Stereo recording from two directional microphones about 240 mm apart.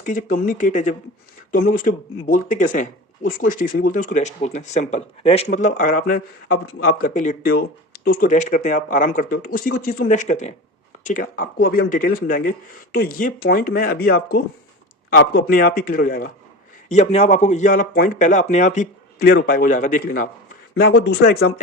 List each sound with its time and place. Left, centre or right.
0.0 s speech: left